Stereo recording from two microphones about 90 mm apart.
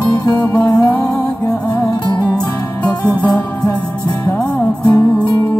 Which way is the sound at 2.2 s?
15° left (ahead or behind).